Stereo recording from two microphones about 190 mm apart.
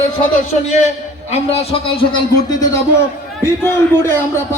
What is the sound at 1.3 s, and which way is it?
A man's voice, 35° left (ahead or behind).